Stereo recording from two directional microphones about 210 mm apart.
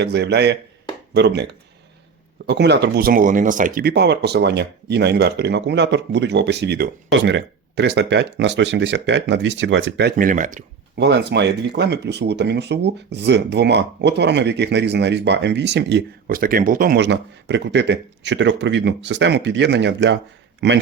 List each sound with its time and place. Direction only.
0.0 s speech: 55° right (ahead or behind)
2.5 s speech: 55° right (ahead or behind)
10.2 s speech: 40° right (ahead or behind)
10.9 s speech: 55° right (ahead or behind)